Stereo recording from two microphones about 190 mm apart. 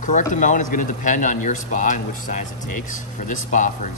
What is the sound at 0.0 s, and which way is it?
A man's voice, 40° left (ahead or behind).